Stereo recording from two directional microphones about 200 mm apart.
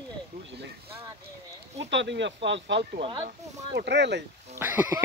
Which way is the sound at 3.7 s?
60° right (ahead or behind).